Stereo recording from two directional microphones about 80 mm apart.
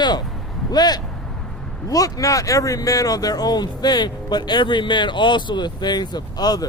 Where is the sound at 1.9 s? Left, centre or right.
Left.